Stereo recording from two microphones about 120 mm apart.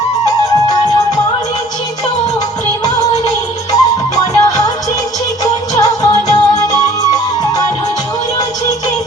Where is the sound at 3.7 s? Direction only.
30° left (ahead or behind).